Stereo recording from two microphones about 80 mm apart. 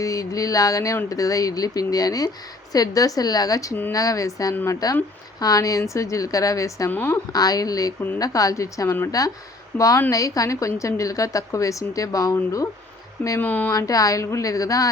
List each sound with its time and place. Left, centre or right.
0.0 s a woman's voice: left
6.9 s a woman's voice: left
7.3 s a woman's voice: left
13.4 s a woman's voice: left
13.7 s a woman's voice: left